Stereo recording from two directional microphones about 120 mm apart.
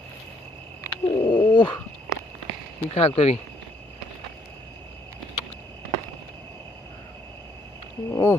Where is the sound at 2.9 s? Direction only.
60° left (ahead or behind).